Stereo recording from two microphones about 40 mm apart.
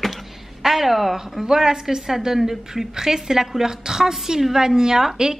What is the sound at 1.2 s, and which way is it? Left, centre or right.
A woman's voice, centre.